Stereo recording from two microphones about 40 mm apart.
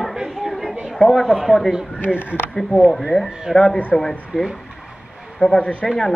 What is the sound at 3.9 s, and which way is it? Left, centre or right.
Speech, centre.